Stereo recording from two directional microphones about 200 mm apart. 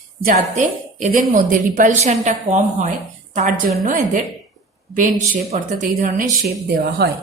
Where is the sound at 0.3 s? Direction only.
35° right (ahead or behind).